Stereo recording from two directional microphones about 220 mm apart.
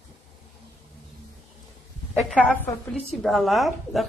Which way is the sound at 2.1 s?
5° left (ahead or behind).